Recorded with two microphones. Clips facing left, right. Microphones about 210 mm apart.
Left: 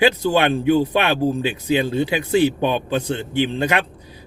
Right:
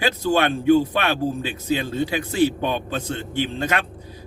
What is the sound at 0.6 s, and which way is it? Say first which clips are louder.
Speech: even; 15° left (ahead or behind).